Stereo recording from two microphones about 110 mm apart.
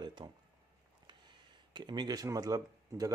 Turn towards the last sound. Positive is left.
turn(degrees=-30)  # may be behind; listen again after turning